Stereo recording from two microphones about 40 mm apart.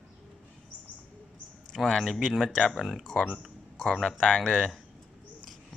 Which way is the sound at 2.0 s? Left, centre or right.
Centre.